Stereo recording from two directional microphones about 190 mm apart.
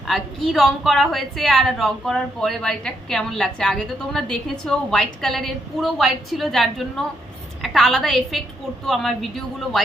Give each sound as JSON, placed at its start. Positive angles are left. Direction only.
{"t": 0.5, "sound": "a woman's voice", "side_deg": 0}